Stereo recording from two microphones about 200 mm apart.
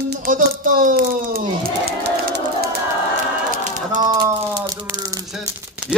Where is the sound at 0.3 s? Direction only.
40° right (ahead or behind).